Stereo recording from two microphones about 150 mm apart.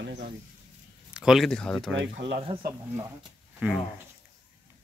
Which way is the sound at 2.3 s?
40° right (ahead or behind).